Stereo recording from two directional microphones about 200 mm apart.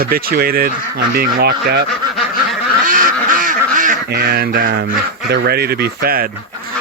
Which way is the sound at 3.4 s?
40° right (ahead or behind).